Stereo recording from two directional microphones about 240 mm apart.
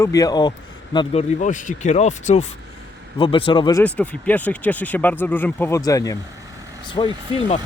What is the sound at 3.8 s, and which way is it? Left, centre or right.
Speech, centre.